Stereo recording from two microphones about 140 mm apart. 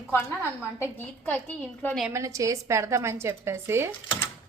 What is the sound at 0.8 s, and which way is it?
Speech, 15° left (ahead or behind).